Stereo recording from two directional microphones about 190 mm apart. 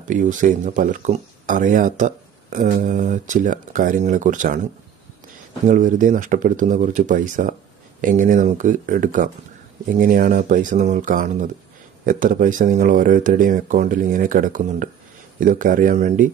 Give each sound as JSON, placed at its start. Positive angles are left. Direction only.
{"t": 0.0, "sound": "speech", "side_deg": -40}
{"t": 5.7, "sound": "speech", "side_deg": -45}